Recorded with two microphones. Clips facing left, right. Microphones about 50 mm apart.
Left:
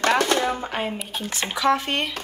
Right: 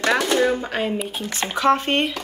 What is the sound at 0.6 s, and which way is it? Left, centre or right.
Speech, centre.